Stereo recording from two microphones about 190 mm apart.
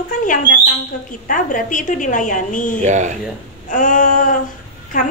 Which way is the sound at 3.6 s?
45° left (ahead or behind).